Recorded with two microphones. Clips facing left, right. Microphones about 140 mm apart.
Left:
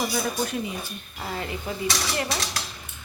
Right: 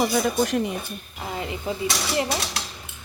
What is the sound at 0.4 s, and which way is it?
Speech, 65° right (ahead or behind).